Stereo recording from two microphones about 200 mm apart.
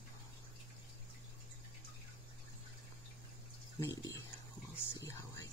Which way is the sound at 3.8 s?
15° left (ahead or behind).